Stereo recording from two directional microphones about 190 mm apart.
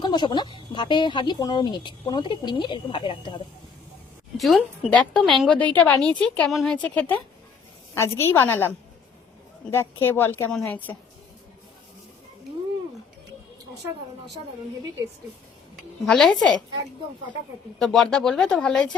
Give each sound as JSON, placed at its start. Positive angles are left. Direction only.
{"t": 0.0, "sound": "speech", "side_deg": 25}
{"t": 4.4, "sound": "a woman's voice", "side_deg": 0}
{"t": 9.7, "sound": "a woman's voice", "side_deg": 10}
{"t": 16.0, "sound": "a woman's voice", "side_deg": 5}
{"t": 17.7, "sound": "a woman's voice", "side_deg": 0}